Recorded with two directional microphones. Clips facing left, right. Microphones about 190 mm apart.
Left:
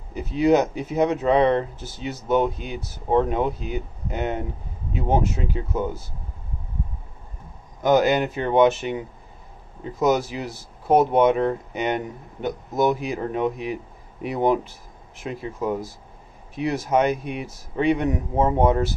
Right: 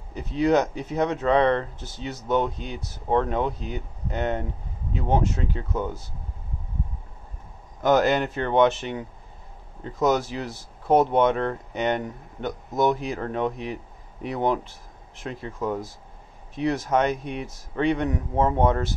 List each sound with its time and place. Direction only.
0.1 s speech: 10° left (ahead or behind)
7.8 s speech: centre (ahead or behind)